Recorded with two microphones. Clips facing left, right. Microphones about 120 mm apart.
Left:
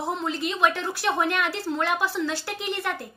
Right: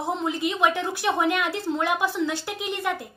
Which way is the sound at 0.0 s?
15° right (ahead or behind).